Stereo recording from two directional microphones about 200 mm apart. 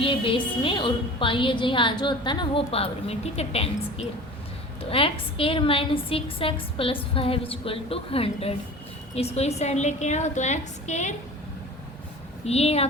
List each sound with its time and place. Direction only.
0.0 s a woman's voice: 25° left (ahead or behind)
12.5 s a woman's voice: 30° left (ahead or behind)